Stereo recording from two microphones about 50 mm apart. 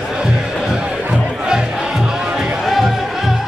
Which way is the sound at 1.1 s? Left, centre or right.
Centre.